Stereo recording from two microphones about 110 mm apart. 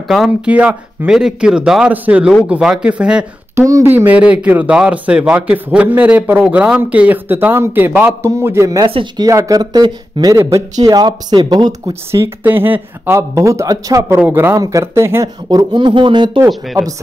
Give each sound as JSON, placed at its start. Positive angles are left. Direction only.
{"t": 0.5, "sound": "a man's voice", "side_deg": -10}
{"t": 3.5, "sound": "speech", "side_deg": -25}
{"t": 3.9, "sound": "a man's voice", "side_deg": -15}
{"t": 8.8, "sound": "speech", "side_deg": -45}
{"t": 10.3, "sound": "speech", "side_deg": -30}
{"t": 11.9, "sound": "speech", "side_deg": -25}
{"t": 15.5, "sound": "speech", "side_deg": -45}